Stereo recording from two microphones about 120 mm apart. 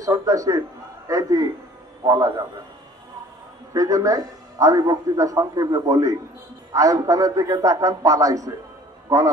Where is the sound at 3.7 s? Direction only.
30° right (ahead or behind).